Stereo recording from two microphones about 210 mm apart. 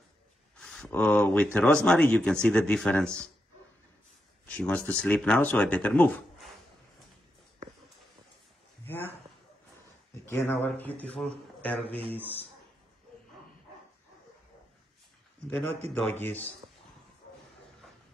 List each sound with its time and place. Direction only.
0.6 s speech: 5° left (ahead or behind)
4.5 s speech: 5° left (ahead or behind)
8.8 s a sound: 10° left (ahead or behind)
10.2 s speech: 10° left (ahead or behind)
15.9 s speech: 10° left (ahead or behind)